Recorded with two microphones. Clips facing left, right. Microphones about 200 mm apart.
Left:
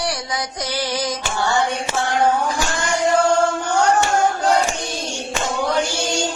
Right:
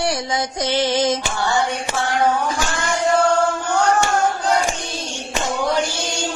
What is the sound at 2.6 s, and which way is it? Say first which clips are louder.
Music: left 1 dB; 15° left (ahead or behind).